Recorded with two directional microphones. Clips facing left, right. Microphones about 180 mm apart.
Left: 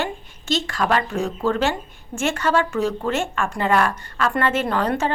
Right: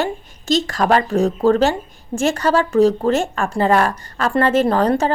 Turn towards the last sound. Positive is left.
turn(degrees=-40)  # may be behind; listen again after turning